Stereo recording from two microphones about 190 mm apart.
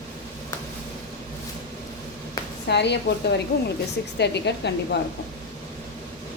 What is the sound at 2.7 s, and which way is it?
Speech, 65° left (ahead or behind).